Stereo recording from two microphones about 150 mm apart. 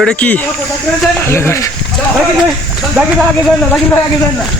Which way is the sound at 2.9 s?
Centre (ahead or behind).